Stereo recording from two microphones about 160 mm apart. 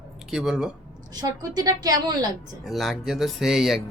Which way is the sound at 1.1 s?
25° right (ahead or behind).